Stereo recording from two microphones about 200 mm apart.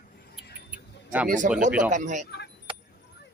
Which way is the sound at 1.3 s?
40° right (ahead or behind).